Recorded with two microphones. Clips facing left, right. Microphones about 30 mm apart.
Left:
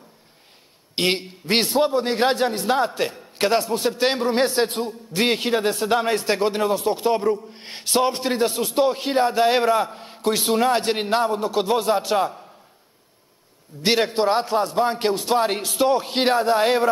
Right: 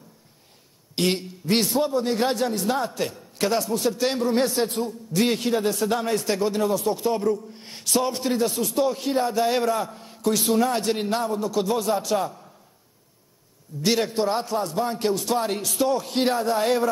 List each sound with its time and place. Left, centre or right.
0.9 s a man's voice: left
13.8 s a man's voice: left